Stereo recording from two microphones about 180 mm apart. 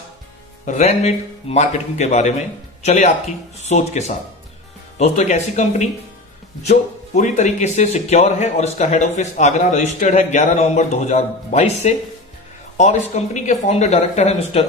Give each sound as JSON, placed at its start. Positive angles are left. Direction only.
{"t": 0.6, "sound": "speech", "side_deg": 40}